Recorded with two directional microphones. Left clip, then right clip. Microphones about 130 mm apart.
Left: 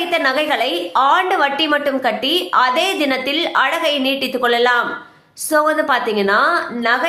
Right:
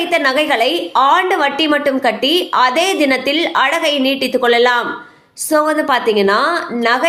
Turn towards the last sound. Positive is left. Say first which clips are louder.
# right 2 dB
turn(degrees=-30)  # may be behind; listen again after turning